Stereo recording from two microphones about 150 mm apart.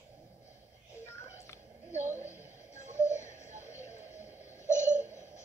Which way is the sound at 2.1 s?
20° left (ahead or behind).